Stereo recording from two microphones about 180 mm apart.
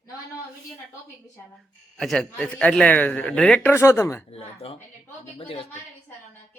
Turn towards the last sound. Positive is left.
turn(degrees=30)  # may be behind; listen again after turning